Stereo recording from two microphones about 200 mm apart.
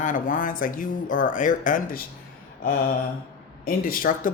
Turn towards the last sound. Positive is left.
turn(degrees=45)  # may be behind; listen again after turning